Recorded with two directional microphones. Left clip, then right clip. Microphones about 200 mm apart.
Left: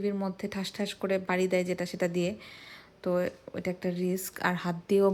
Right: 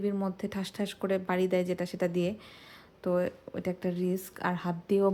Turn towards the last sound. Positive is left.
turn(degrees=0)  # may be behind; listen again after turning